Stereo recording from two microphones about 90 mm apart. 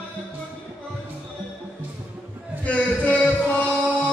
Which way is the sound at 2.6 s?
15° left (ahead or behind).